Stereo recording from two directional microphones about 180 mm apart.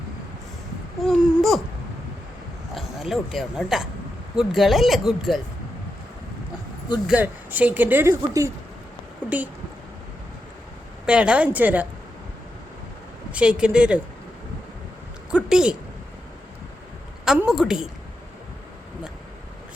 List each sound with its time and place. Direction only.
1.0 s a sound: 5° right (ahead or behind)
2.7 s speech: centre (ahead or behind)
7.1 s speech: 10° right (ahead or behind)
9.3 s speech: 5° right (ahead or behind)
11.0 s speech: 5° right (ahead or behind)
13.3 s speech: 5° right (ahead or behind)
15.4 s speech: 5° right (ahead or behind)
17.2 s speech: 5° right (ahead or behind)